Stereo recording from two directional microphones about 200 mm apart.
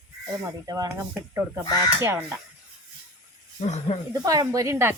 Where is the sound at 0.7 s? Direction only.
20° right (ahead or behind).